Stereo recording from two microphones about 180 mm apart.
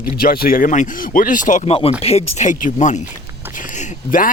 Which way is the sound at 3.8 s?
50° left (ahead or behind).